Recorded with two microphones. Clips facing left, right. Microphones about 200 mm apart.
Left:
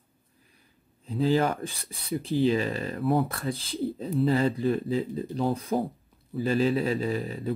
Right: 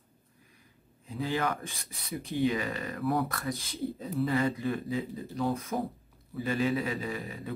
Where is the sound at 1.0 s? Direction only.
30° left (ahead or behind).